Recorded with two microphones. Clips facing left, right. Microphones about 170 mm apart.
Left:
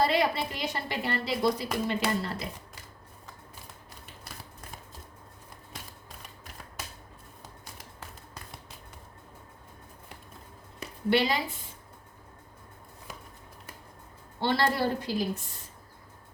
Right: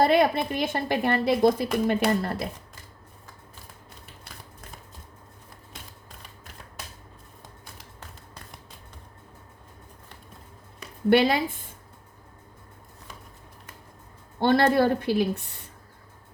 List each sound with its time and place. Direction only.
0.0 s a woman's voice: 50° right (ahead or behind)
11.1 s a woman's voice: 55° right (ahead or behind)
14.4 s a woman's voice: 50° right (ahead or behind)